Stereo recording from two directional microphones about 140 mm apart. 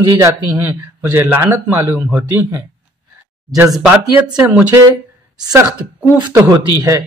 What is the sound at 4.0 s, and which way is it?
Speech, 25° right (ahead or behind).